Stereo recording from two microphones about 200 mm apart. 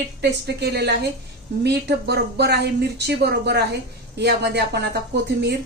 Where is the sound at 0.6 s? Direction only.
55° right (ahead or behind).